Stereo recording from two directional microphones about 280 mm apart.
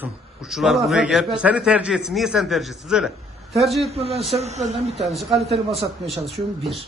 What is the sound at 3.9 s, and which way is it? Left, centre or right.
A man's voice, right.